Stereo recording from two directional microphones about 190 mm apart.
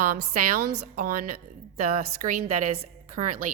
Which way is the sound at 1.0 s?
45° right (ahead or behind).